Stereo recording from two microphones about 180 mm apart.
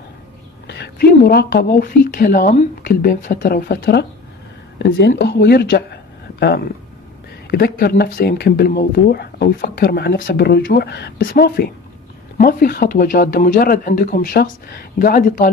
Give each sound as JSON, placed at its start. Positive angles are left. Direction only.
{"t": 0.7, "sound": "speech", "side_deg": 65}
{"t": 4.9, "sound": "speech", "side_deg": 70}
{"t": 7.4, "sound": "speech", "side_deg": 60}